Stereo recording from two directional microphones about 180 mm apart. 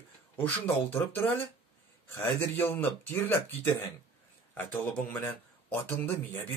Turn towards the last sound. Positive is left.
turn(degrees=10)  # may be behind; listen again after turning